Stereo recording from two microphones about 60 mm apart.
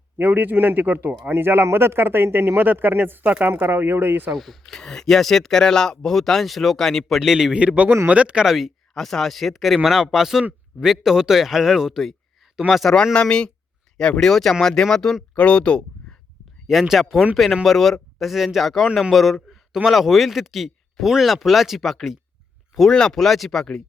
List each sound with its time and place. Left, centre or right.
0.2 s speech: right
4.3 s a man's voice: centre
7.2 s speech: centre
7.5 s speech: centre
8.4 s a man's voice: centre
9.0 s a man's voice: centre
13.1 s speech: centre
16.9 s a man's voice: centre